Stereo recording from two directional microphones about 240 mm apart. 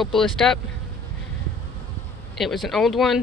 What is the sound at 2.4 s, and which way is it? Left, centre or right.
Speech, centre.